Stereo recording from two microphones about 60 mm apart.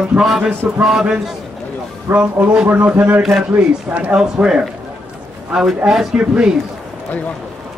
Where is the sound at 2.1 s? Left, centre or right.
Right.